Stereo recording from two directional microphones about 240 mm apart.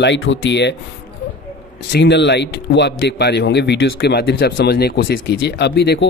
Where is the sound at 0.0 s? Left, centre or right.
Left.